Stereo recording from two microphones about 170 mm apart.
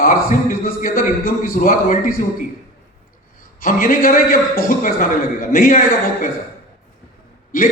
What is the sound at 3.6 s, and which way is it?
A man's voice, 55° left (ahead or behind).